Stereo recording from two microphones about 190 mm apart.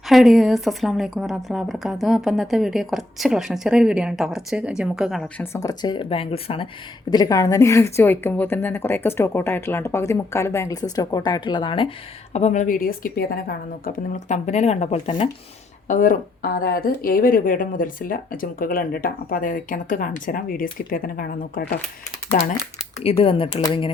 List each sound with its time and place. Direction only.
0.1 s a woman's voice: centre (ahead or behind)
5.4 s a woman's voice: 15° left (ahead or behind)
12.3 s a woman's voice: 35° left (ahead or behind)
15.9 s speech: 45° left (ahead or behind)
23.0 s speech: 30° left (ahead or behind)